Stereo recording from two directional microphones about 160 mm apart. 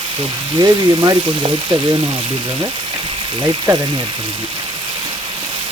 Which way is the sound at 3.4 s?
25° right (ahead or behind).